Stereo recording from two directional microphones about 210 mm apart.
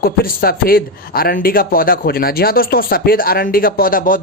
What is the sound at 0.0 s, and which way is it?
Speech, 45° left (ahead or behind).